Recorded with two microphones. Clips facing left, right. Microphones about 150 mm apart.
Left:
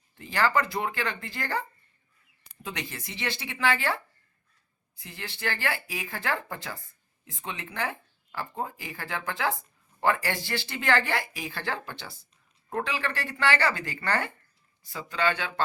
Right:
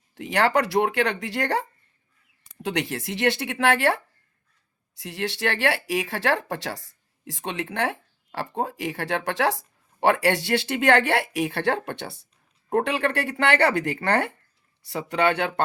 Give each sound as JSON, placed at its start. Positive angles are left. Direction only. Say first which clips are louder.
{"t": 0.1, "sound": "speech", "louder": "right 4 dB", "side_deg": -75}